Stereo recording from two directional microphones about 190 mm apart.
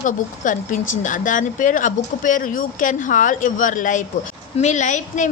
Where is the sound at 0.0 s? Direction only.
45° left (ahead or behind).